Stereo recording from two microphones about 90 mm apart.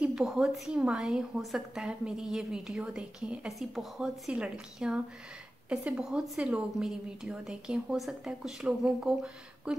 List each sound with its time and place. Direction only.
0.0 s a woman's voice: 10° right (ahead or behind)